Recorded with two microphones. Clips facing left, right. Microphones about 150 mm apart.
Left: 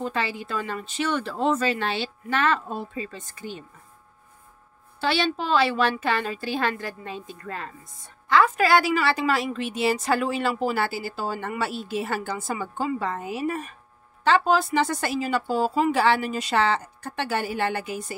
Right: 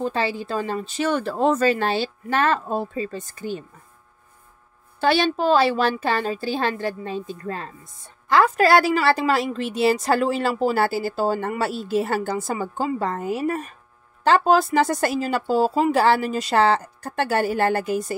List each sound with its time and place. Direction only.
0.0 s a woman's voice: 35° right (ahead or behind)
5.0 s a woman's voice: 45° right (ahead or behind)